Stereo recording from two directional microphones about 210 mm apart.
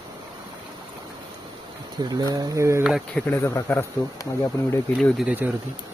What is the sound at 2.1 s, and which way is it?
Speech, 15° right (ahead or behind).